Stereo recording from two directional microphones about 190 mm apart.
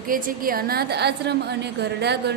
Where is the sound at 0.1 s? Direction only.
50° right (ahead or behind).